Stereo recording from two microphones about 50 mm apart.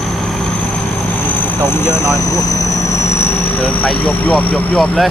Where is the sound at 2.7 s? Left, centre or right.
Left.